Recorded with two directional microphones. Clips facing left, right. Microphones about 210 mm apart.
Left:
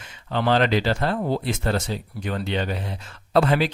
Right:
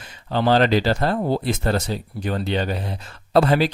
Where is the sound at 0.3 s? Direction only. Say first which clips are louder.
Right 3 dB; 35° right (ahead or behind).